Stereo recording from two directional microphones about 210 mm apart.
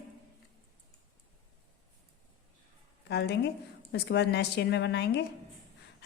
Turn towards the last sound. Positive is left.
turn(degrees=55)  # may be behind; listen again after turning